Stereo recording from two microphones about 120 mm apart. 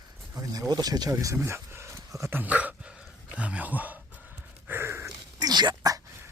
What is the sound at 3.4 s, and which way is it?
Gasp, 10° right (ahead or behind).